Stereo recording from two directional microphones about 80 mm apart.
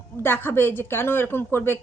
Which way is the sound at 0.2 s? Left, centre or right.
Left.